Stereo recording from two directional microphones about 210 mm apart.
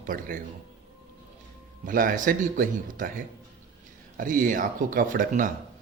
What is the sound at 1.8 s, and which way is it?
Speech, 40° right (ahead or behind).